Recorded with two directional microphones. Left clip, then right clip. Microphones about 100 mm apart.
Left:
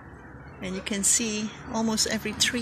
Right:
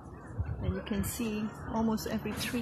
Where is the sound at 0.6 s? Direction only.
30° left (ahead or behind).